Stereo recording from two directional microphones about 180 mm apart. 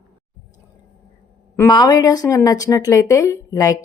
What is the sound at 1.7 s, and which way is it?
Speech, 25° left (ahead or behind).